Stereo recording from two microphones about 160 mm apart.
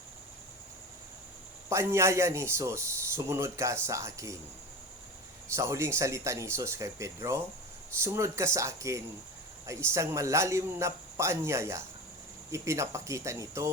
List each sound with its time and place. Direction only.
1.7 s a man's voice: 15° right (ahead or behind)
5.5 s a man's voice: 15° right (ahead or behind)